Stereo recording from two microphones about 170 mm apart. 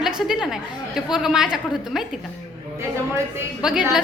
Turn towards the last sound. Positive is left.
turn(degrees=-5)  # may be behind; listen again after turning